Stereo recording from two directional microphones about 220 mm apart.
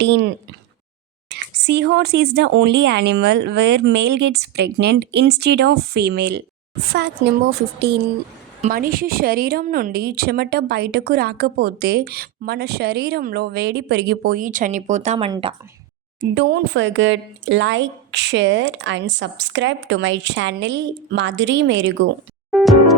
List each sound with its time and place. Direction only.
0.0 s a woman's voice: 50° right (ahead or behind)
8.6 s a woman's voice: 40° right (ahead or behind); by 15.5 s 25° right (ahead or behind)
16.3 s speech: 50° right (ahead or behind)
22.5 s music: centre (ahead or behind)